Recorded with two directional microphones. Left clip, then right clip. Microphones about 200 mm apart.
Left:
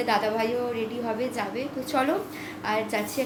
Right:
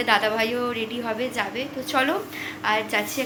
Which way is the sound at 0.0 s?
Centre (ahead or behind).